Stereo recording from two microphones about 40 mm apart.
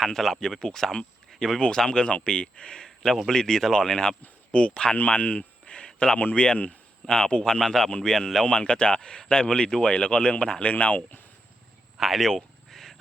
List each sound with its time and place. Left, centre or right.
0.0 s speech: centre
3.0 s speech: centre
4.5 s speech: left
5.0 s speech: left
5.4 s a sound: left
6.3 s speech: left
8.4 s speech: left
11.9 s speech: centre
12.3 s a sound: centre